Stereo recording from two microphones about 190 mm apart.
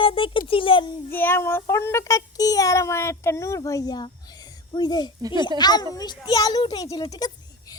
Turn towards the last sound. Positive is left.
turn(degrees=20)  # may be behind; listen again after turning